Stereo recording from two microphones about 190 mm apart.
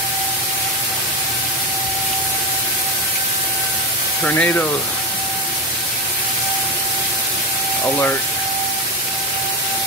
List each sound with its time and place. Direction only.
4.2 s speech: 5° left (ahead or behind)